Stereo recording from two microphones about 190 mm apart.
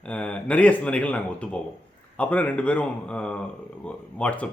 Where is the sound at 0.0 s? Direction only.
5° left (ahead or behind).